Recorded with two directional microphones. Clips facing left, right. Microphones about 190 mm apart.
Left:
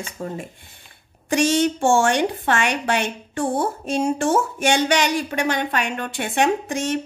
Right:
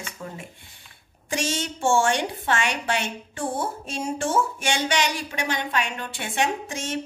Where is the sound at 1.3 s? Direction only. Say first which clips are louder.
Left 10 dB; 60° left (ahead or behind).